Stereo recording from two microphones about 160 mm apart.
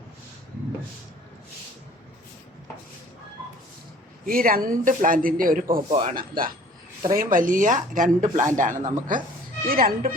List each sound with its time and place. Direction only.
4.3 s speech: 60° right (ahead or behind)